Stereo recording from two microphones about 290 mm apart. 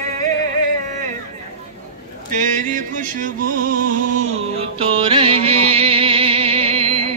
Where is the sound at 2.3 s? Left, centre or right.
Right.